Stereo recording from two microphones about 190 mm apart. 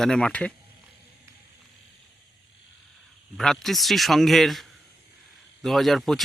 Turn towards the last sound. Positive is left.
turn(degrees=0)  # may be behind; listen again after turning